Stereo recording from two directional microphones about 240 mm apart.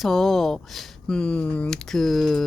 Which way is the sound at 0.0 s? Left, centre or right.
Centre.